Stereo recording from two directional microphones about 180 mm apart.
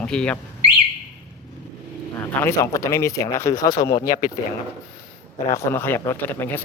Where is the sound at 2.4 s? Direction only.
15° left (ahead or behind).